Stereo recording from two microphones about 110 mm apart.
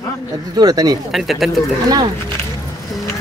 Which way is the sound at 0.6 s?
35° right (ahead or behind).